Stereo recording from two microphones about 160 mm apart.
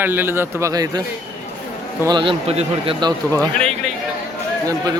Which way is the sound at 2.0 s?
30° right (ahead or behind).